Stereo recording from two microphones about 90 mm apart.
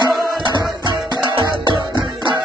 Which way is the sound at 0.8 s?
55° right (ahead or behind).